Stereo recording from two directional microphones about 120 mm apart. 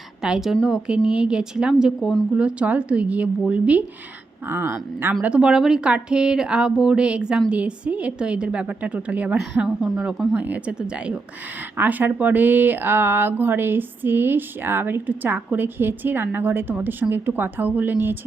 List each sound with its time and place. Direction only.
0.2 s a woman's voice: 5° right (ahead or behind)
5.2 s a woman's voice: 10° right (ahead or behind)